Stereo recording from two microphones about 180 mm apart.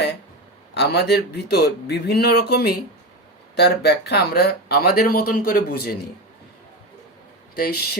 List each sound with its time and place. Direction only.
0.7 s speech: 65° left (ahead or behind)
7.5 s speech: 60° left (ahead or behind)